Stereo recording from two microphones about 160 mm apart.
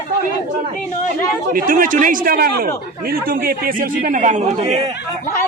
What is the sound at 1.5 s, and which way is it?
A man's voice, 60° right (ahead or behind).